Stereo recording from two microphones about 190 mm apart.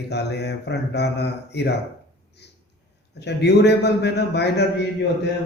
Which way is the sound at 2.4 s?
60° left (ahead or behind).